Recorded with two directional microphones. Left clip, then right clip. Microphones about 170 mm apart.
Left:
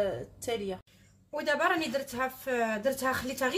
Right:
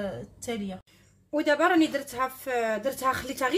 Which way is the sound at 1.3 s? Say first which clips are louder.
Right 5 dB; 40° right (ahead or behind).